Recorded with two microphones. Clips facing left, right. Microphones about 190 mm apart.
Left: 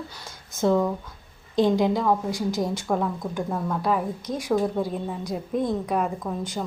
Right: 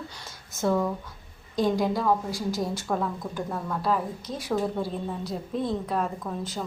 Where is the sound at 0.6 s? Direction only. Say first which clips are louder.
Left 4 dB; 15° left (ahead or behind).